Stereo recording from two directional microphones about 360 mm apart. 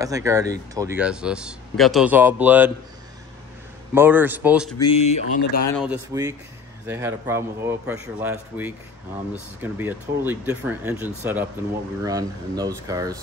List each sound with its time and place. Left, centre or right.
0.0 s speech: centre
3.9 s speech: centre
4.9 s speech: centre
5.8 s speech: centre